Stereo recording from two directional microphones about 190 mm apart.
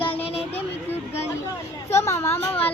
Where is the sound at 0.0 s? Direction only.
30° left (ahead or behind).